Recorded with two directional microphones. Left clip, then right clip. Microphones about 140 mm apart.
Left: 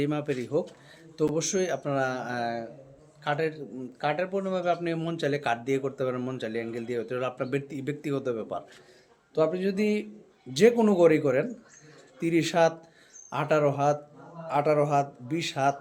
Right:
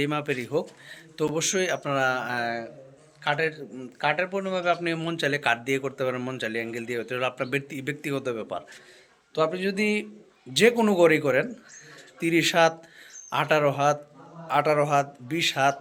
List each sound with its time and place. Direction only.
0.0 s a man's voice: 5° left (ahead or behind)
9.3 s a man's voice: 20° left (ahead or behind); by 15.7 s centre (ahead or behind)